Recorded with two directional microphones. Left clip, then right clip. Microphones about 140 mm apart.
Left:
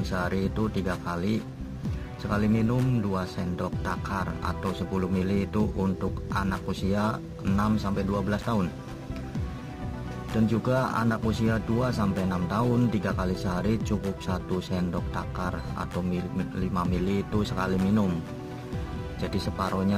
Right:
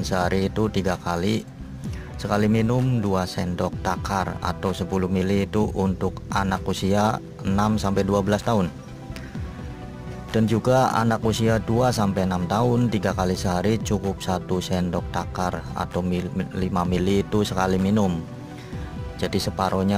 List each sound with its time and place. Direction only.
0.1 s speech: 25° right (ahead or behind)
10.3 s speech: 25° right (ahead or behind)
19.2 s speech: 25° right (ahead or behind)